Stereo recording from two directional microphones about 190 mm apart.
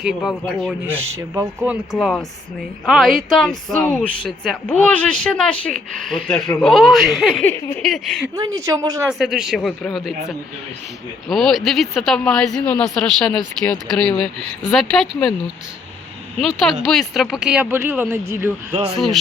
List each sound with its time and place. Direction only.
0.0 s speech: centre (ahead or behind)
1.4 s speech: 10° right (ahead or behind)
7.4 s speech: 10° left (ahead or behind)
8.5 s speech: 15° right (ahead or behind)
9.0 s speech: centre (ahead or behind)
16.8 s speech: centre (ahead or behind)
18.9 s speech: centre (ahead or behind)